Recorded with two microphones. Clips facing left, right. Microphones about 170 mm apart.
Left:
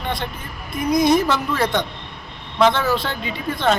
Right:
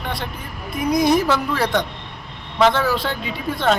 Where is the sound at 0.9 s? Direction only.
10° right (ahead or behind).